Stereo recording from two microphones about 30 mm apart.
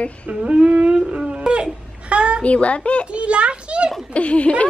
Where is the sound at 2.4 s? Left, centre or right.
Left.